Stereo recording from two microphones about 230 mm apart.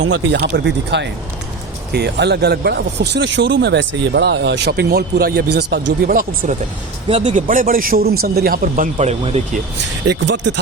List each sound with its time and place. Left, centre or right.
0.0 s a man's voice: right
10.1 s a man's voice: right